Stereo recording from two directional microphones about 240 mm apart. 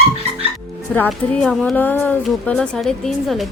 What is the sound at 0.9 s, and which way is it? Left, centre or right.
A woman's voice, centre.